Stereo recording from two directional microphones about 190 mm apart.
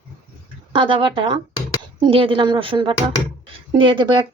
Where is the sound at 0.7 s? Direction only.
25° right (ahead or behind).